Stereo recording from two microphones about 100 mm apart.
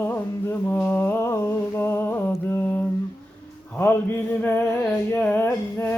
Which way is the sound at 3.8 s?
20° left (ahead or behind).